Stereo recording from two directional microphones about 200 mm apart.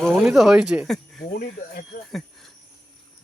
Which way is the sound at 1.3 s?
50° left (ahead or behind).